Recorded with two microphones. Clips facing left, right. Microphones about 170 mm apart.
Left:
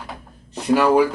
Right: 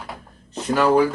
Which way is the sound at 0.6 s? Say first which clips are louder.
Left 2 dB; 10° left (ahead or behind).